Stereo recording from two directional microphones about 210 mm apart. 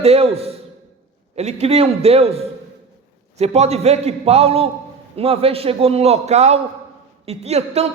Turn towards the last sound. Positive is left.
turn(degrees=-30)  # may be behind; listen again after turning